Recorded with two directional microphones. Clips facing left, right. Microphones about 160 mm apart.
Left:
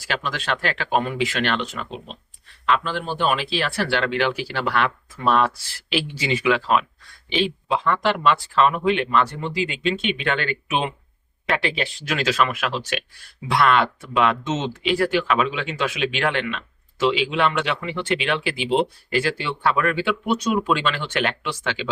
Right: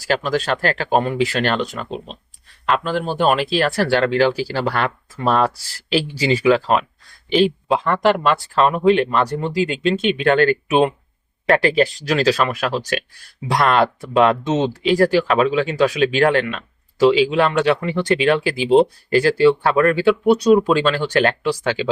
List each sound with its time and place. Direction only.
0.0 s speech: 40° right (ahead or behind)